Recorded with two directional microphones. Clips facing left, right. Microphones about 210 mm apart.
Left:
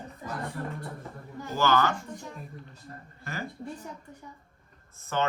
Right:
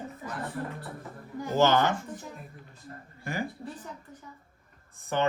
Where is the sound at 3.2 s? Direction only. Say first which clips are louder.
Right 4 dB; 15° right (ahead or behind).